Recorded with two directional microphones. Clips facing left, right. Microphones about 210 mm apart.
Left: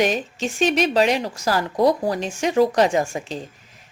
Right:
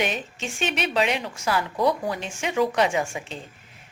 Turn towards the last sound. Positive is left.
turn(degrees=35)  # may be behind; listen again after turning